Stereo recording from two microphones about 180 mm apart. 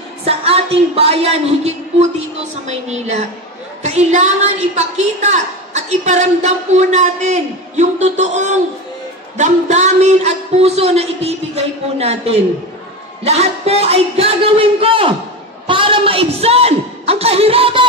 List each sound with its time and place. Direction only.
0.2 s a woman's voice: 35° right (ahead or behind)